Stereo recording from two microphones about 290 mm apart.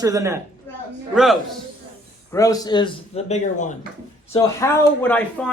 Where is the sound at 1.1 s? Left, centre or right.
Centre.